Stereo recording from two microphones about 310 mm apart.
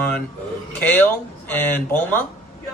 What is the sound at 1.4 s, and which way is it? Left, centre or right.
Speech, centre.